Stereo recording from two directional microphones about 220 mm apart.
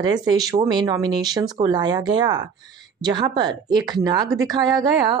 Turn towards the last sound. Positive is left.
turn(degrees=-20)  # may be behind; listen again after turning